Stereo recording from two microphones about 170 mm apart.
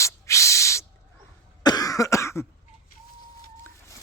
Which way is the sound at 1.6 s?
20° left (ahead or behind).